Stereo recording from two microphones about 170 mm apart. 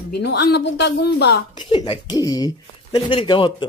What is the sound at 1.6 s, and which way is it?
Speech, 30° left (ahead or behind).